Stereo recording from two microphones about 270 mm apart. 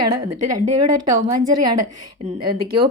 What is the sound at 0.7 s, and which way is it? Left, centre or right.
A woman's voice, right.